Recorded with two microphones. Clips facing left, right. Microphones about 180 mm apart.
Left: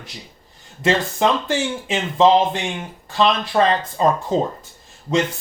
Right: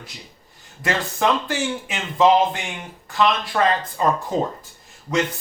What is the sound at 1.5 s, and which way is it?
Speech, 25° left (ahead or behind).